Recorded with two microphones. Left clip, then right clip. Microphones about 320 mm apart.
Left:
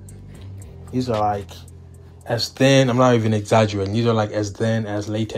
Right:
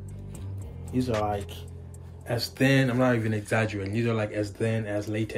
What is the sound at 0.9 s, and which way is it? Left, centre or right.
Speech, centre.